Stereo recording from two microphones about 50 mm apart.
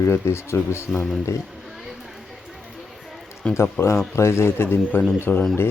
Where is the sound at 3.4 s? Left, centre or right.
Left.